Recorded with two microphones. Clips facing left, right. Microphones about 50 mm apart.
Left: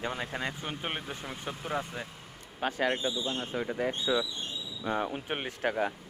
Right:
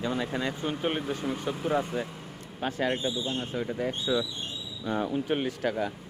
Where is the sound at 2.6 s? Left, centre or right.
Left.